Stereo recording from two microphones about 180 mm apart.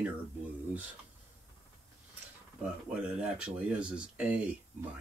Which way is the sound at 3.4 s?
5° right (ahead or behind).